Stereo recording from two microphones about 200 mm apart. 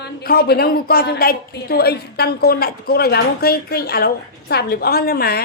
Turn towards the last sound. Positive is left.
turn(degrees=50)  # may be behind; listen again after turning